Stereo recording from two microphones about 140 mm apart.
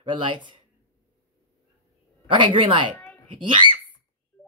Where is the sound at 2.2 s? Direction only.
35° right (ahead or behind).